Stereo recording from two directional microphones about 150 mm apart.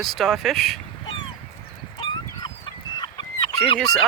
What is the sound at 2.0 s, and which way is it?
Fowl, 30° left (ahead or behind).